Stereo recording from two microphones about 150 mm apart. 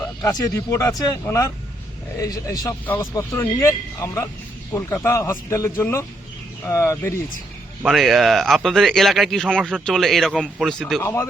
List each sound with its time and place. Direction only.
0.2 s speech: 25° left (ahead or behind)
7.8 s speech: 5° right (ahead or behind)
11.0 s speech: 15° left (ahead or behind)